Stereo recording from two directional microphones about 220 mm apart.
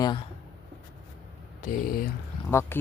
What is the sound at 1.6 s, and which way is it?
Speech, 40° left (ahead or behind).